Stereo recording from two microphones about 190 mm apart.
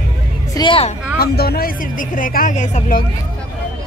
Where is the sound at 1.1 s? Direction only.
55° left (ahead or behind).